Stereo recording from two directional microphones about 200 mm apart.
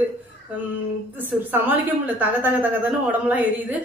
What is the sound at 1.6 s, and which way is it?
A woman's voice, 10° right (ahead or behind).